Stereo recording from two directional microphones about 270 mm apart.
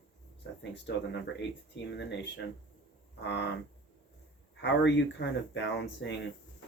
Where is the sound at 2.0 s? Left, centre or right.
Left.